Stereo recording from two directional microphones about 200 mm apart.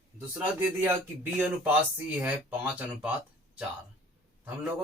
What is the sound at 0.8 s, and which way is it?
Speech, 10° right (ahead or behind).